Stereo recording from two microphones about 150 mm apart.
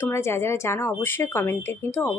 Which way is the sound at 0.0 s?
15° left (ahead or behind).